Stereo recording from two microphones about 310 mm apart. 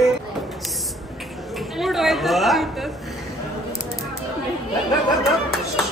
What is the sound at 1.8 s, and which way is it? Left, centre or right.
A woman's voice, centre.